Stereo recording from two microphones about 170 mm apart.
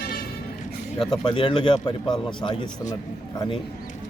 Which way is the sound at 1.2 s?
25° left (ahead or behind).